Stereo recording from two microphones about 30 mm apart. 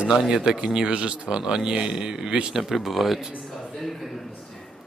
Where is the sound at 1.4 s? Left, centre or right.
Right.